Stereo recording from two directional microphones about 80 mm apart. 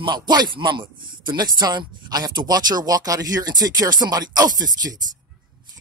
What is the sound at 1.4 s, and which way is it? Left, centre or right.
Speech, right.